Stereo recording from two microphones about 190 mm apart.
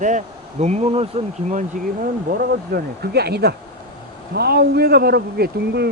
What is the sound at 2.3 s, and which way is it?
Speech, 55° right (ahead or behind).